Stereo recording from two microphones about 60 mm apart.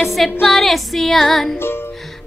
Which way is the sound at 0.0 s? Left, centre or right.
Centre.